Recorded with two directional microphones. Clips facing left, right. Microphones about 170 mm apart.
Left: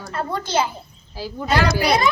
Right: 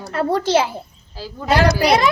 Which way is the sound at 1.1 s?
15° left (ahead or behind).